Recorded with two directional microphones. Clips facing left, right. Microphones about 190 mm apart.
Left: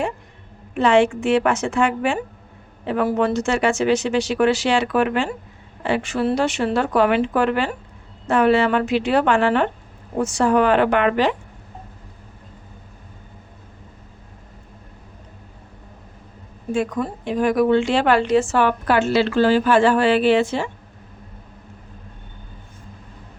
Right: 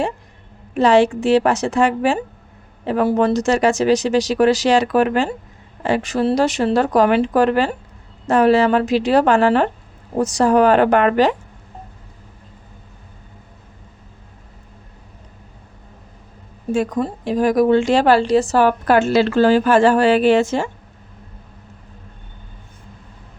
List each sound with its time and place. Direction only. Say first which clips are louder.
0.7 s a woman's voice: right 2 dB; 40° right (ahead or behind)
16.7 s a woman's voice: right 3 dB; 35° right (ahead or behind)